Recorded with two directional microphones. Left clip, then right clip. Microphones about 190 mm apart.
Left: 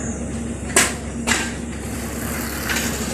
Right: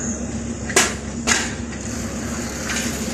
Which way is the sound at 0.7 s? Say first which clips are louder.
Even; 50° right (ahead or behind).